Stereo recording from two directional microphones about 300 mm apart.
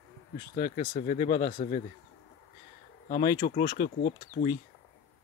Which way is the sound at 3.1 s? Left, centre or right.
Left.